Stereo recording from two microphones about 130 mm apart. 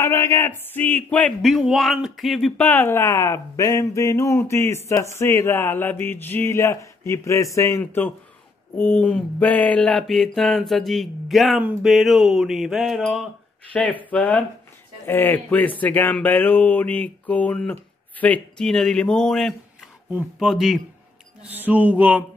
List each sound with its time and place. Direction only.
0.0 s mantra: 20° left (ahead or behind); by 2.6 s centre (ahead or behind)
2.6 s speech: 15° left (ahead or behind)
8.7 s mantra: 15° left (ahead or behind); by 13.2 s centre (ahead or behind)
13.7 s a sound: 10° left (ahead or behind)
18.2 s mantra: 10° left (ahead or behind)
21.4 s mantra: 10° right (ahead or behind)